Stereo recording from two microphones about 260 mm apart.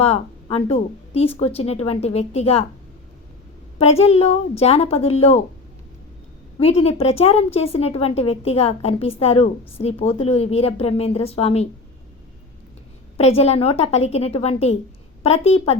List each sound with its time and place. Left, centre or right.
0.0 s a woman's voice: left
3.8 s a woman's voice: left
6.6 s a woman's voice: left
13.1 s a woman's voice: left